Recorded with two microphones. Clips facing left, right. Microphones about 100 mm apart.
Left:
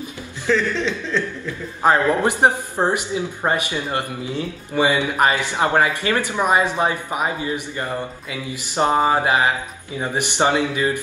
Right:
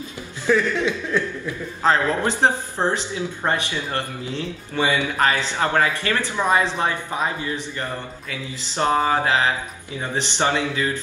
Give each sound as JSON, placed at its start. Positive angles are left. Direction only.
{"t": 0.5, "sound": "speech", "side_deg": -15}
{"t": 1.8, "sound": "speech", "side_deg": 15}